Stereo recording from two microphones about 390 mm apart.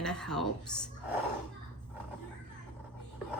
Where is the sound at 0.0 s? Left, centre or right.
Centre.